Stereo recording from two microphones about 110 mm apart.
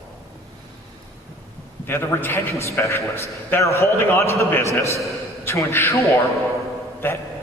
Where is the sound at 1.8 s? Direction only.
20° left (ahead or behind).